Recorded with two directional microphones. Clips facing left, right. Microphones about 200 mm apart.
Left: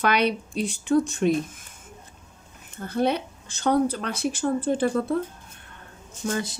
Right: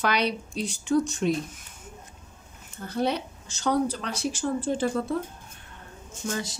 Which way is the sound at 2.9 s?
55° left (ahead or behind).